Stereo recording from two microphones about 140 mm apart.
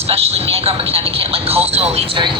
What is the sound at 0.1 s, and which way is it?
Speech, 45° right (ahead or behind).